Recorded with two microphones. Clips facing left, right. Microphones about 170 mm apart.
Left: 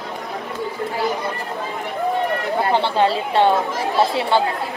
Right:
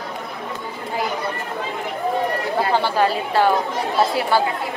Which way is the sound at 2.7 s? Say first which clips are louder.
Left 2 dB; 25° left (ahead or behind).